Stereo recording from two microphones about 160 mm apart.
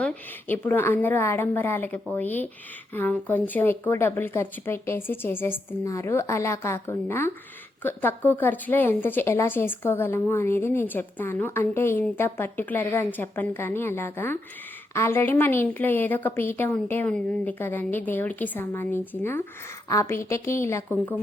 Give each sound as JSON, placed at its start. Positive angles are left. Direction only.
{"t": 0.0, "sound": "a woman's voice", "side_deg": 10}